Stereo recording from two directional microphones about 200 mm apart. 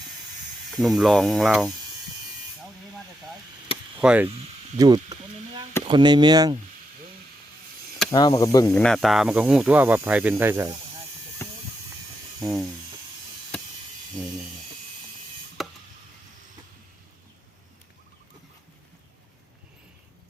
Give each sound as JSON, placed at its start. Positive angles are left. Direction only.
{"t": 0.7, "sound": "speech", "side_deg": 0}
{"t": 3.9, "sound": "speech", "side_deg": -5}
{"t": 4.8, "sound": "speech", "side_deg": -20}
{"t": 8.1, "sound": "speech", "side_deg": 20}
{"t": 8.7, "sound": "speech", "side_deg": 5}
{"t": 11.4, "sound": "a sound", "side_deg": 15}
{"t": 12.4, "sound": "speech", "side_deg": 0}
{"t": 14.2, "sound": "speech", "side_deg": -5}
{"t": 15.6, "sound": "chop", "side_deg": 0}